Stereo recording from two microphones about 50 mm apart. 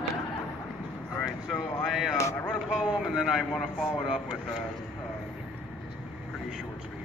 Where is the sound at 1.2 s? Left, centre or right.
Centre.